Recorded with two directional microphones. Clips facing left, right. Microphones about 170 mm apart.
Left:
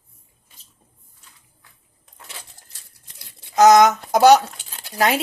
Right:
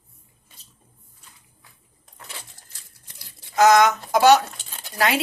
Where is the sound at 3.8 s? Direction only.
40° left (ahead or behind).